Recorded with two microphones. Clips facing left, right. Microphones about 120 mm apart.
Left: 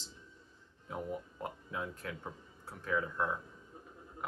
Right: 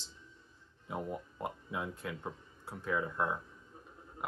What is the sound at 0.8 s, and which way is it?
Speech, 10° right (ahead or behind).